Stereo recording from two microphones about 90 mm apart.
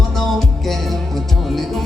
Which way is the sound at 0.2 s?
Centre (ahead or behind).